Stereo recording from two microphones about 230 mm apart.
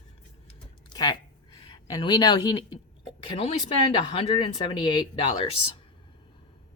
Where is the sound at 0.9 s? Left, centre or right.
Centre.